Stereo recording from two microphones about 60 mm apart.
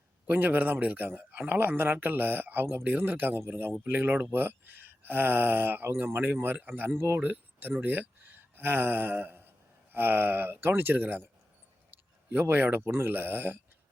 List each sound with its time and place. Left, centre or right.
0.3 s speech: right
6.9 s speech: right
7.2 s speech: right
12.3 s speech: right